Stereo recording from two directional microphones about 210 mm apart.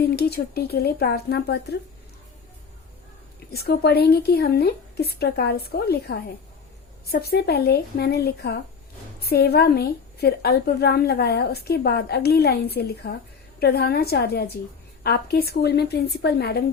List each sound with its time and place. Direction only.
0.0 s a woman's voice: 50° left (ahead or behind)
3.5 s a woman's voice: 50° left (ahead or behind)